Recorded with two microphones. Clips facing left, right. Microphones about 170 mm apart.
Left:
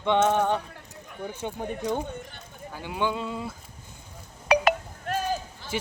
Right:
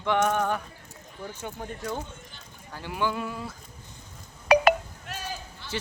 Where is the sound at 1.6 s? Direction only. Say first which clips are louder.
Left 5 dB; 15° left (ahead or behind).